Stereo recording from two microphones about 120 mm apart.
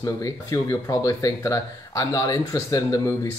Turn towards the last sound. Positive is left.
turn(degrees=30)  # may be behind; listen again after turning